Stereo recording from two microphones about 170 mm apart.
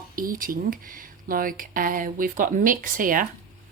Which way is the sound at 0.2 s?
55° right (ahead or behind).